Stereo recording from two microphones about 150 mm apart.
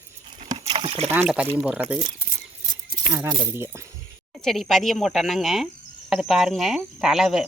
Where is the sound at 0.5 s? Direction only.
35° right (ahead or behind).